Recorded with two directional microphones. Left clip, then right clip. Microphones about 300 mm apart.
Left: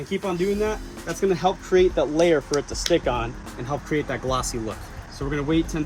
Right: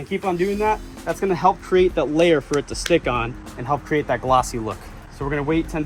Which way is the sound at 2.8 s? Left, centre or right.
Right.